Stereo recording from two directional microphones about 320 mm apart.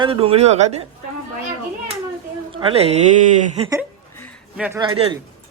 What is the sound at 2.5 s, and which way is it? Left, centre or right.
Speech, centre.